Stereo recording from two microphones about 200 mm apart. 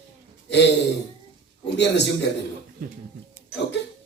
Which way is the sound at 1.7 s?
60° left (ahead or behind).